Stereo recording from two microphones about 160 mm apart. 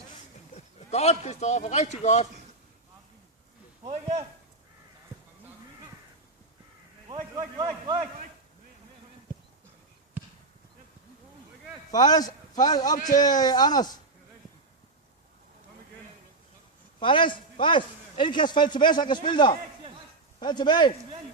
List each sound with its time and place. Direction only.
0.5 s a man's voice: 45° left (ahead or behind)
7.1 s a man's voice: 25° right (ahead or behind)
11.9 s a man's voice: 25° left (ahead or behind)
17.0 s a man's voice: 30° left (ahead or behind)